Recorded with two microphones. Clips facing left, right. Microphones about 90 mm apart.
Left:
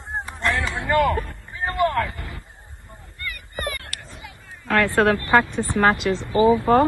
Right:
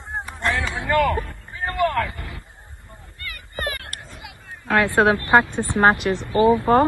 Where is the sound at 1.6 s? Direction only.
20° left (ahead or behind).